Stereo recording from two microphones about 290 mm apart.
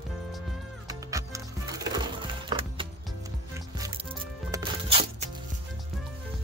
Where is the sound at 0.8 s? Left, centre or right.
Centre.